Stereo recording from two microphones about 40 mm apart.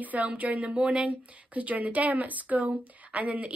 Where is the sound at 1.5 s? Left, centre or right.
Right.